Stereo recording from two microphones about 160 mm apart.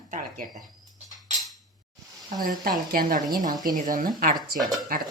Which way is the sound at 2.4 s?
65° right (ahead or behind).